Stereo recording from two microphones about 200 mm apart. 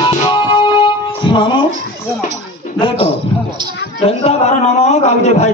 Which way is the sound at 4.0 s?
30° left (ahead or behind).